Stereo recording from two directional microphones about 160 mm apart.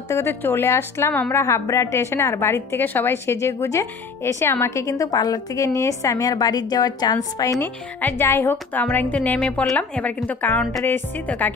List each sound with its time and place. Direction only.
0.1 s speech: 15° left (ahead or behind)
7.6 s speech: 10° left (ahead or behind)